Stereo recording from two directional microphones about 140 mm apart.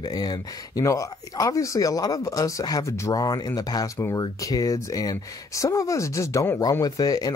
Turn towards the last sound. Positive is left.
turn(degrees=25)  # may be behind; listen again after turning